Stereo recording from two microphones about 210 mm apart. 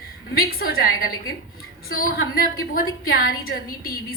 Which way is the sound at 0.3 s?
45° left (ahead or behind).